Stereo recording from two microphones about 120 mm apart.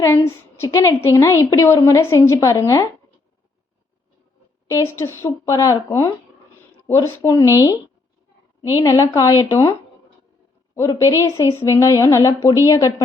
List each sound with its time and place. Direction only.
0.0 s a woman's voice: 20° left (ahead or behind)
4.7 s a woman's voice: 25° left (ahead or behind)
10.8 s a woman's voice: 25° left (ahead or behind)